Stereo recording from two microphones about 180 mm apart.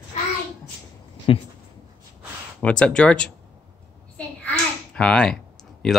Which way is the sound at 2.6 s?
5° left (ahead or behind).